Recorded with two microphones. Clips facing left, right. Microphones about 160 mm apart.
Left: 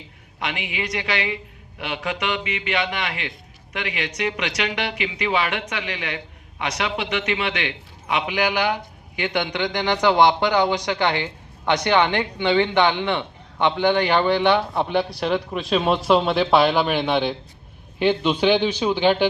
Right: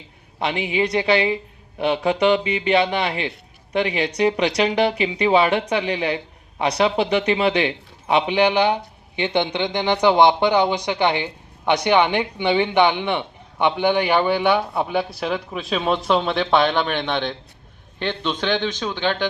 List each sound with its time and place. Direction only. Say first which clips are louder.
0.3 s a woman's voice: right 7 dB; 30° right (ahead or behind); by 19.3 s 15° left (ahead or behind)